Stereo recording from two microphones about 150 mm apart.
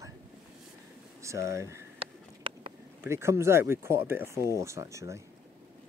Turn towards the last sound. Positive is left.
turn(degrees=-20)  # may be behind; listen again after turning